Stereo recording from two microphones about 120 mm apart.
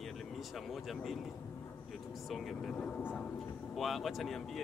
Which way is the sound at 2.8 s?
15° left (ahead or behind).